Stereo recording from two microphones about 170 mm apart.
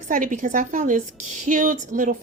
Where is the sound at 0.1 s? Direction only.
50° right (ahead or behind).